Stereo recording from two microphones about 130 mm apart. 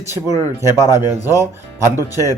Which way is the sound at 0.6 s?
20° right (ahead or behind).